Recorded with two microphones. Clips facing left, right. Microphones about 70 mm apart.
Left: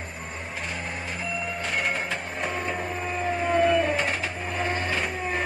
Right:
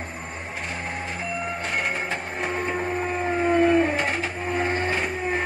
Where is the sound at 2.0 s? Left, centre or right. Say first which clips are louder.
Right 2 dB; right.